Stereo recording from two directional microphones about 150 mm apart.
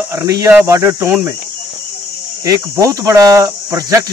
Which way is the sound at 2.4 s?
25° right (ahead or behind).